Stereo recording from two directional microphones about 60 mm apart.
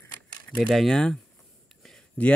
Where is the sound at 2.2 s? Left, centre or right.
Left.